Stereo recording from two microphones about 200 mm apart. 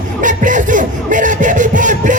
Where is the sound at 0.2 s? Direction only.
40° right (ahead or behind).